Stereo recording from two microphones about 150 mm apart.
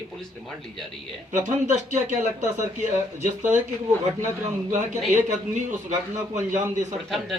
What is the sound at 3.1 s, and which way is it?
Speech, 55° right (ahead or behind).